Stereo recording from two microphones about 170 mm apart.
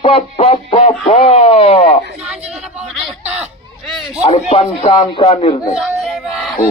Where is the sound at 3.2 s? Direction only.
40° right (ahead or behind).